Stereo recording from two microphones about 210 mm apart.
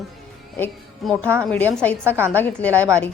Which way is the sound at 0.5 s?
10° left (ahead or behind).